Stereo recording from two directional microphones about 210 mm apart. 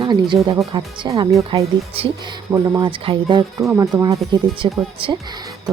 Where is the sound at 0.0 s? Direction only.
20° right (ahead or behind).